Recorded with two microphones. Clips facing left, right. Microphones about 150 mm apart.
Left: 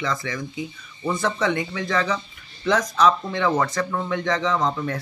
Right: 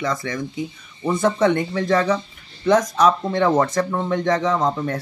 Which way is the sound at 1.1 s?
25° right (ahead or behind).